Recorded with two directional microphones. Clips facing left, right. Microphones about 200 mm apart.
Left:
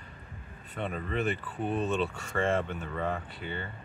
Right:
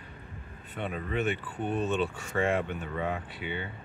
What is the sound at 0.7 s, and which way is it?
Speech, 5° right (ahead or behind).